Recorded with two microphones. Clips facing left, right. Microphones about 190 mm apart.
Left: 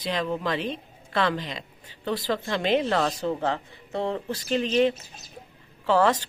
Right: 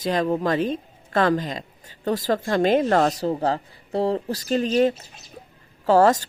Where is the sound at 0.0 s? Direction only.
45° right (ahead or behind).